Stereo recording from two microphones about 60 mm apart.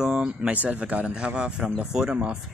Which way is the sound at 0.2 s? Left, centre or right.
Right.